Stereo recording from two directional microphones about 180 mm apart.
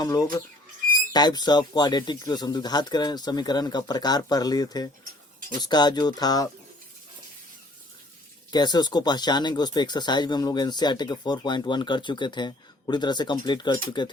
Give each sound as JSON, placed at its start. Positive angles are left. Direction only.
{"t": 0.0, "sound": "speech", "side_deg": 20}
{"t": 8.4, "sound": "speech", "side_deg": 25}